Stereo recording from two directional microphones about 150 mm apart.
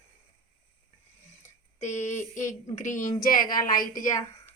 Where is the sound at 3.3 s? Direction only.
70° left (ahead or behind).